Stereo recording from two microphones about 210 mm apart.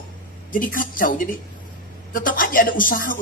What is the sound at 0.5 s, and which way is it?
Speech, 40° left (ahead or behind).